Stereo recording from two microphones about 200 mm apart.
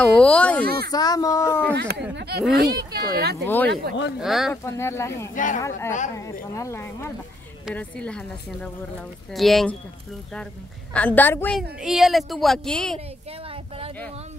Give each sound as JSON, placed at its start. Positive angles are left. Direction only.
{"t": 0.0, "sound": "a woman's voice", "side_deg": 5}
{"t": 0.7, "sound": "speech", "side_deg": -50}
{"t": 0.9, "sound": "speech", "side_deg": 20}
{"t": 1.8, "sound": "speech", "side_deg": -55}
{"t": 4.2, "sound": "a woman's voice", "side_deg": 0}
{"t": 4.6, "sound": "speech", "side_deg": 15}
{"t": 5.3, "sound": "speech", "side_deg": 40}
{"t": 5.6, "sound": "a woman's voice", "side_deg": 15}
{"t": 10.9, "sound": "speech", "side_deg": 5}
{"t": 11.8, "sound": "a woman's voice", "side_deg": 0}